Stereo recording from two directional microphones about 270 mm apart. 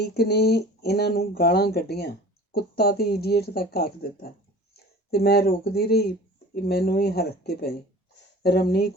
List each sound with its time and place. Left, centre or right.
0.0 s speech: left